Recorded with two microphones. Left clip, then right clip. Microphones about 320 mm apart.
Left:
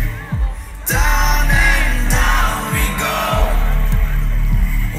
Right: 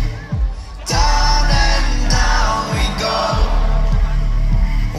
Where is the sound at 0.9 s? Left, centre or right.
Right.